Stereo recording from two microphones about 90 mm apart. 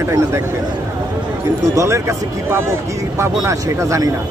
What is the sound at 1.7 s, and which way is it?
Speech, 35° right (ahead or behind).